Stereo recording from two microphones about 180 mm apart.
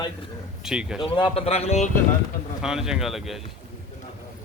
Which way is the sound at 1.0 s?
30° left (ahead or behind).